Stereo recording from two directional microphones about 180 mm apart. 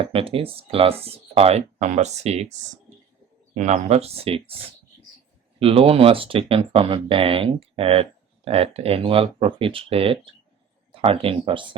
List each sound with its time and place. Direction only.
0.0 s speech: 30° right (ahead or behind)
5.5 s speech: 30° right (ahead or behind)